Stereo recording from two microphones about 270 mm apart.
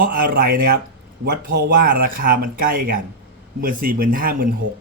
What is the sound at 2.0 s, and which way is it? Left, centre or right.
Speech, right.